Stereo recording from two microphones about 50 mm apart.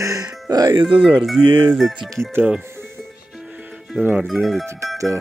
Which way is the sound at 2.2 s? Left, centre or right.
Centre.